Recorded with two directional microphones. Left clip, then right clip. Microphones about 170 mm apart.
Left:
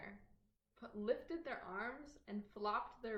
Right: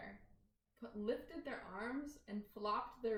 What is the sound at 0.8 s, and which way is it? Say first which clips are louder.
A woman's voice: left 2 dB; 35° left (ahead or behind).